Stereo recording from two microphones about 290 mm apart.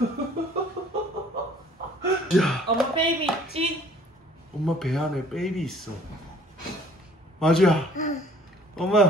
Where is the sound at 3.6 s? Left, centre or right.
Right.